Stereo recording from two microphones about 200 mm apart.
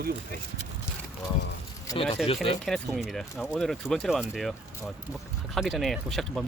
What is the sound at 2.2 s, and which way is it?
Speech, centre (ahead or behind).